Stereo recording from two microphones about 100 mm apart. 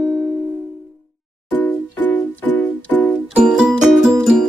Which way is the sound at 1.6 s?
15° left (ahead or behind).